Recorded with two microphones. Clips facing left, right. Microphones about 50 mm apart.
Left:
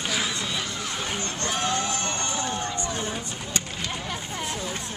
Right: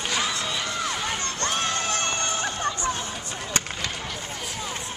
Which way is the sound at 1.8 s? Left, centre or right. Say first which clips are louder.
Right 2 dB; right.